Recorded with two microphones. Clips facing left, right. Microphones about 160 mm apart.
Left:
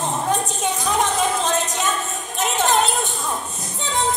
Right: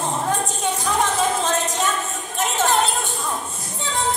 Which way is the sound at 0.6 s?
20° left (ahead or behind).